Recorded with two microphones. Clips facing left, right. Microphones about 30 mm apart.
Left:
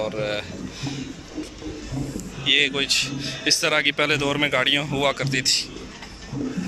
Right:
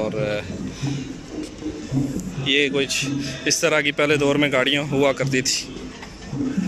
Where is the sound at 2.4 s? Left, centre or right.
Left.